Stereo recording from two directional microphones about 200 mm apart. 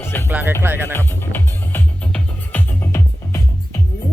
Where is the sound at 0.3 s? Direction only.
10° right (ahead or behind).